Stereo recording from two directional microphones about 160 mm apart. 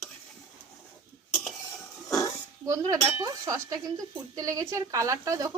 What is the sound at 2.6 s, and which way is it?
Speech, 20° right (ahead or behind).